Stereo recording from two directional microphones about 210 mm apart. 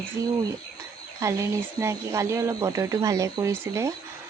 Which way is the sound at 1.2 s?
15° right (ahead or behind).